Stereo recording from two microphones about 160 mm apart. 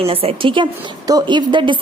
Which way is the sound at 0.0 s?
35° right (ahead or behind).